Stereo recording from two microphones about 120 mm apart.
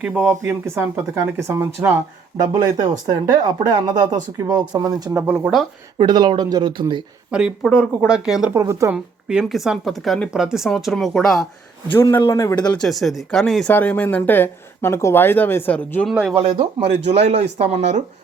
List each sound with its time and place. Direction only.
0.0 s speech: 10° right (ahead or behind)
2.6 s speech: 35° right (ahead or behind)
5.1 s speech: 20° right (ahead or behind)
6.0 s speech: 35° right (ahead or behind)
7.3 s speech: 5° right (ahead or behind)
8.5 s speech: 25° right (ahead or behind)
8.9 s speech: 10° right (ahead or behind)
12.3 s speech: 25° left (ahead or behind)
12.6 s speech: 5° left (ahead or behind)
13.7 s speech: 15° left (ahead or behind)
16.3 s speech: 55° right (ahead or behind)